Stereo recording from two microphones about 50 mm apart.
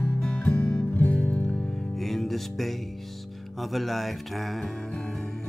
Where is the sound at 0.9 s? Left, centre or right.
Left.